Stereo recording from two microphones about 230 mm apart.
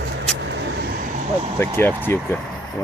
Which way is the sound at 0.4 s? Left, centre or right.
Right.